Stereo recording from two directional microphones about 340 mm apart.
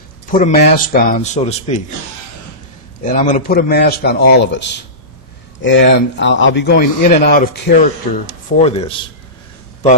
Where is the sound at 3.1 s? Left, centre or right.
Left.